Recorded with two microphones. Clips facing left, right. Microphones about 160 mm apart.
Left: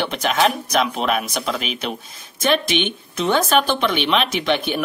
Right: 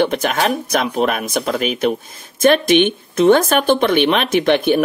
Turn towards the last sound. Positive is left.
turn(degrees=-50)  # may be behind; listen again after turning